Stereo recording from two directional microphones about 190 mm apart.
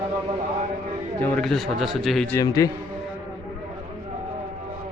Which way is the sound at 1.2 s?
Centre (ahead or behind).